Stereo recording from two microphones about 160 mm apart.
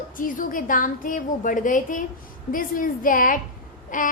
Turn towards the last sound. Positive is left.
turn(degrees=55)  # may be behind; listen again after turning